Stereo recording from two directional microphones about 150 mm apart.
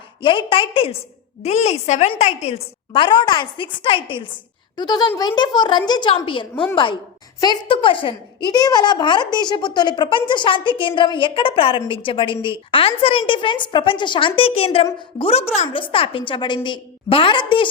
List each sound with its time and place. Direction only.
0.2 s a woman's voice: 35° left (ahead or behind)